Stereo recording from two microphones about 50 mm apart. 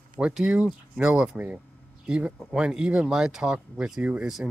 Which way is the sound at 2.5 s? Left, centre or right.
Centre.